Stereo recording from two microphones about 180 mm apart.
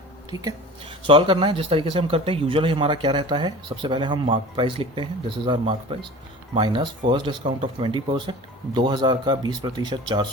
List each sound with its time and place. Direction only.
0.3 s speech: 25° right (ahead or behind)